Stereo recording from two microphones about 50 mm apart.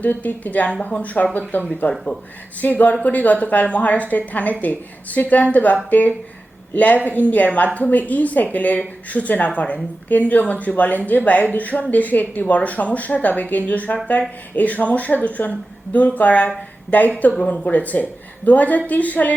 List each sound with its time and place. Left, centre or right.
0.0 s speech: left